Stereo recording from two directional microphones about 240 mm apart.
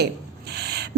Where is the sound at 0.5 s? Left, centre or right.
Right.